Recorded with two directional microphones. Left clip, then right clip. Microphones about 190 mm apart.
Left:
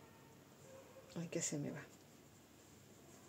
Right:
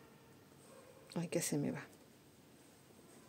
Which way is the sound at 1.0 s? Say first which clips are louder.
Right 5 dB; 40° right (ahead or behind).